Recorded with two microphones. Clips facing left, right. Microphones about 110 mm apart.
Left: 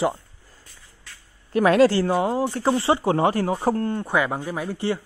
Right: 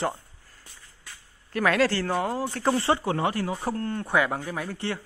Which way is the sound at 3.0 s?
30° left (ahead or behind).